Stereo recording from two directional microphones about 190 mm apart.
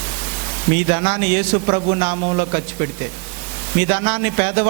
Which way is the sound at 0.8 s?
20° right (ahead or behind).